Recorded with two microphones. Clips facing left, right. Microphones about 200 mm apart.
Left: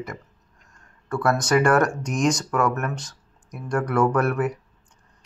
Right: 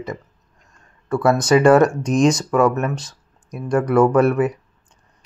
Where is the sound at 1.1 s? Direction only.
20° right (ahead or behind).